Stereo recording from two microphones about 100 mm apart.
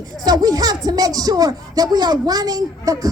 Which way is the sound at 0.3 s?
40° right (ahead or behind).